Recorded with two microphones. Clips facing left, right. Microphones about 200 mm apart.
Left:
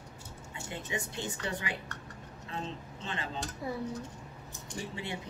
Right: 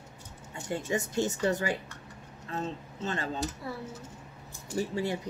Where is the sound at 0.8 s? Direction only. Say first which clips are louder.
Right 8 dB; 45° right (ahead or behind).